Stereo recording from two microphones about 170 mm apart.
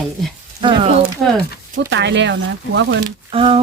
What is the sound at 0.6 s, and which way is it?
Speech, 30° right (ahead or behind).